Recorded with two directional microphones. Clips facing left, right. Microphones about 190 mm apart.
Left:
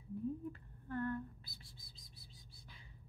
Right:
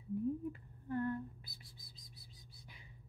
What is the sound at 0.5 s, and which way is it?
Speech, 15° right (ahead or behind).